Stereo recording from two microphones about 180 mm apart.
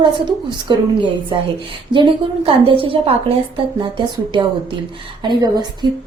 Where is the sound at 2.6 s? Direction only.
30° right (ahead or behind).